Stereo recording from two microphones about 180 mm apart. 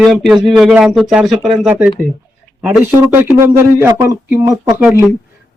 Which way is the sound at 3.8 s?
15° right (ahead or behind).